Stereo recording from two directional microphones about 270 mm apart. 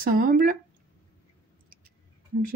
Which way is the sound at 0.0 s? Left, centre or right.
Right.